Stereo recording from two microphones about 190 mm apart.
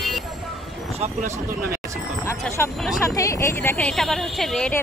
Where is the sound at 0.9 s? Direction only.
35° right (ahead or behind).